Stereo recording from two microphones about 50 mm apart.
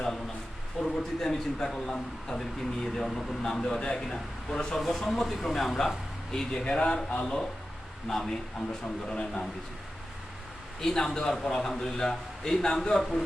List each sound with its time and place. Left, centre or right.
0.8 s a man's voice: centre
6.3 s speech: centre
10.8 s speech: centre